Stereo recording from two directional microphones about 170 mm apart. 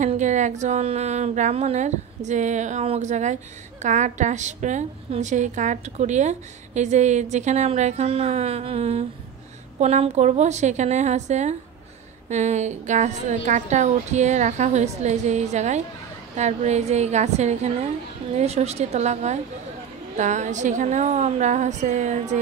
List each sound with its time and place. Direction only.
0.0 s a woman's voice: 45° right (ahead or behind)